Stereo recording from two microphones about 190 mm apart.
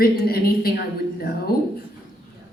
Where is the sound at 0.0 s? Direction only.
50° left (ahead or behind).